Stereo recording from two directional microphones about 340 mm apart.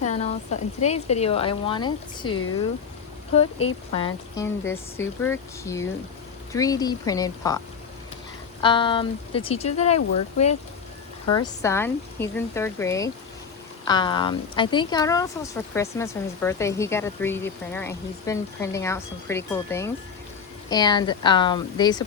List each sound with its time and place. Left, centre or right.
0.0 s a woman's voice: centre
2.3 s speech: left
3.9 s a woman's voice: centre
8.6 s a woman's voice: centre
10.3 s speech: left
11.3 s a woman's voice: centre